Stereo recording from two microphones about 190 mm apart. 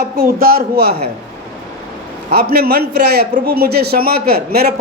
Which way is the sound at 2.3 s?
55° right (ahead or behind).